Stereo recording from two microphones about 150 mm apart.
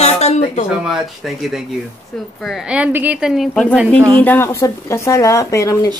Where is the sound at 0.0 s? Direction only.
45° left (ahead or behind).